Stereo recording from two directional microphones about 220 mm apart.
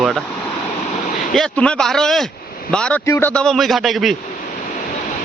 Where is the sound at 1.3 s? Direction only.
5° left (ahead or behind).